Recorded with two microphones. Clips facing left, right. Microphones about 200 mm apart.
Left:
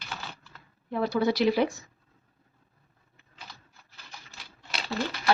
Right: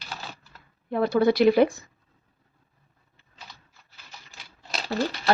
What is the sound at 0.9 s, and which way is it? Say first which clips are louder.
Speech: right 5 dB; 55° right (ahead or behind).